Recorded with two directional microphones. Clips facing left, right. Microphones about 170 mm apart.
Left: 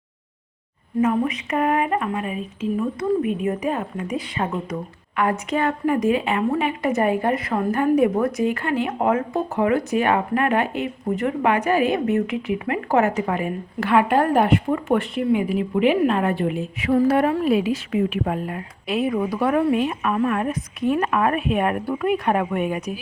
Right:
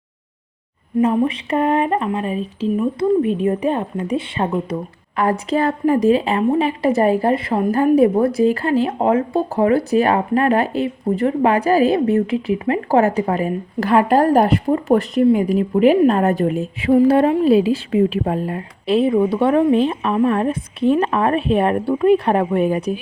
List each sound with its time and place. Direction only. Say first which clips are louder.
1.0 s speech: right 3 dB; 30° right (ahead or behind)
16.9 s a woman's voice: right 5 dB; 30° right (ahead or behind)